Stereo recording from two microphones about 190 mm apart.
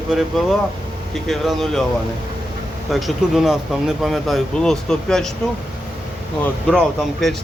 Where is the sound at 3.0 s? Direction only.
Centre (ahead or behind).